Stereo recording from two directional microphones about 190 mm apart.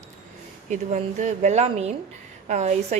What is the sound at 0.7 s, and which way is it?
A woman's voice, 40° right (ahead or behind).